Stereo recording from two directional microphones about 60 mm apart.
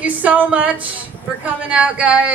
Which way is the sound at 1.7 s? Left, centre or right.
Right.